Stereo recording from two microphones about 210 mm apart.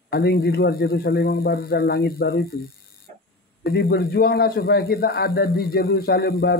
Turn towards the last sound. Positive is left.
turn(degrees=50)  # may be behind; listen again after turning